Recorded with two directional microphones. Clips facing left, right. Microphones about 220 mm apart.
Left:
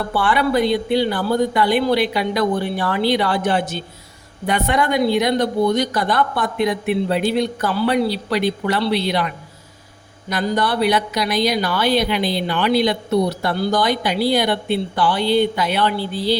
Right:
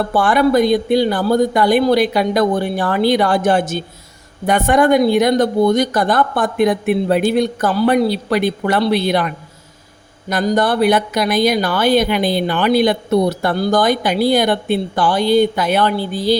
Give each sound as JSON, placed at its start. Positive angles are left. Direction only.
{"t": 0.1, "sound": "speech", "side_deg": -45}